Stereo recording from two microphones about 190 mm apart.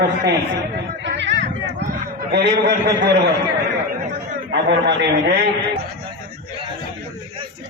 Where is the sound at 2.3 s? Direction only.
60° right (ahead or behind).